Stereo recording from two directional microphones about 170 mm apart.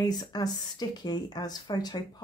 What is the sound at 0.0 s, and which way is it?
Speech, 20° left (ahead or behind).